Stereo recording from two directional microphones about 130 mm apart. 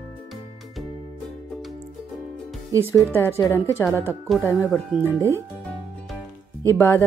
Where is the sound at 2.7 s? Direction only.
25° right (ahead or behind).